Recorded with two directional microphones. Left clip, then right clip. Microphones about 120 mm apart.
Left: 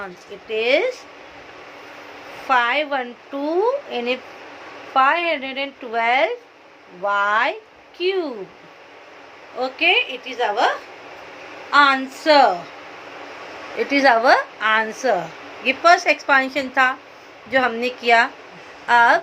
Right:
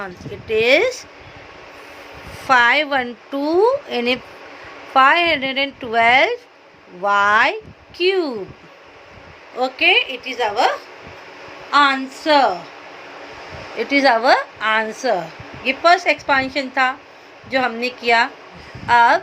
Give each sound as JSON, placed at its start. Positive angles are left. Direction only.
{"t": 0.0, "sound": "speech", "side_deg": -55}
{"t": 2.5, "sound": "speech", "side_deg": -60}
{"t": 9.6, "sound": "a woman's voice", "side_deg": -45}
{"t": 11.7, "sound": "speech", "side_deg": -20}
{"t": 12.0, "sound": "a woman's voice", "side_deg": 0}
{"t": 13.7, "sound": "a woman's voice", "side_deg": -10}